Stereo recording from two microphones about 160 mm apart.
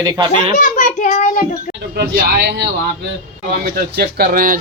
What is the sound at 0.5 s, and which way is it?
Child singing, 55° left (ahead or behind).